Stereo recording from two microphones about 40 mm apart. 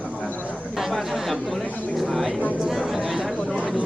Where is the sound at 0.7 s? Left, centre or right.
Centre.